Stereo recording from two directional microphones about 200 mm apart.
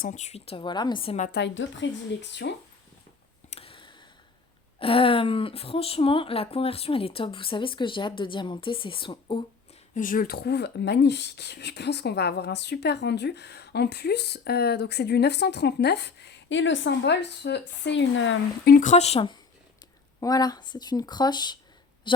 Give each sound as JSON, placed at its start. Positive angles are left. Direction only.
{"t": 0.0, "sound": "speech", "side_deg": 35}
{"t": 1.3, "sound": "speech", "side_deg": 60}
{"t": 3.5, "sound": "a sound", "side_deg": 25}
{"t": 4.8, "sound": "speech", "side_deg": 25}
{"t": 9.9, "sound": "speech", "side_deg": 45}
{"t": 18.7, "sound": "speech", "side_deg": 40}